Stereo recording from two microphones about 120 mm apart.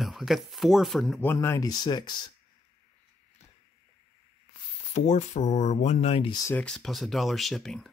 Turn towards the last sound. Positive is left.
turn(degrees=0)  # may be behind; listen again after turning